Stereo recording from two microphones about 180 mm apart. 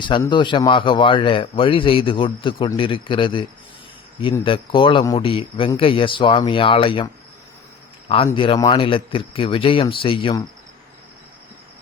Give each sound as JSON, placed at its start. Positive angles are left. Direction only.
{"t": 0.0, "sound": "a man's voice", "side_deg": 25}
{"t": 4.4, "sound": "a man's voice", "side_deg": 25}